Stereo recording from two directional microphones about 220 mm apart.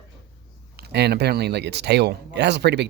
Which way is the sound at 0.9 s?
50° right (ahead or behind).